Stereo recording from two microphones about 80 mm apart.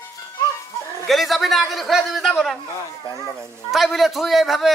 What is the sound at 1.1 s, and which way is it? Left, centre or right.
A man's voice, centre.